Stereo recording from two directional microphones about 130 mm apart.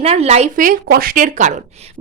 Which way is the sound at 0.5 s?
90° right.